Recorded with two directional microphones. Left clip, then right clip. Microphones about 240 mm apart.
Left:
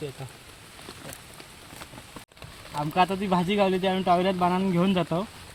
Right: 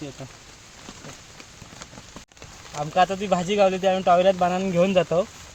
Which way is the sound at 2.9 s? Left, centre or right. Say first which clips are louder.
Right 3 dB; right.